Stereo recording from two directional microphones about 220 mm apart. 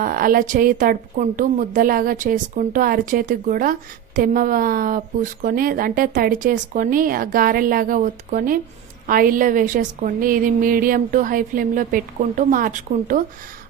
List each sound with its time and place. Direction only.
0.0 s a woman's voice: 40° right (ahead or behind)